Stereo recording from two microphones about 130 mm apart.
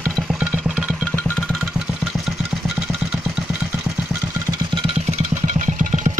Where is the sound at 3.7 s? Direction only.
15° right (ahead or behind).